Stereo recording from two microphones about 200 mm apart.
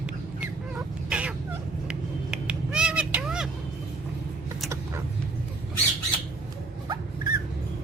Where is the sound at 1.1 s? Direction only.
5° right (ahead or behind).